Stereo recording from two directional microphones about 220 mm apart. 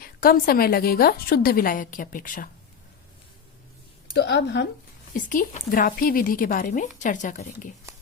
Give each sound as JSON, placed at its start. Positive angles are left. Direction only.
{"t": 0.0, "sound": "a woman's voice", "side_deg": 40}
{"t": 4.1, "sound": "a woman's voice", "side_deg": 50}
{"t": 5.1, "sound": "a woman's voice", "side_deg": 40}